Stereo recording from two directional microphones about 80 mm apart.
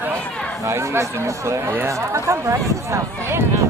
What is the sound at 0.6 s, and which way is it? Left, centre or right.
Speech, right.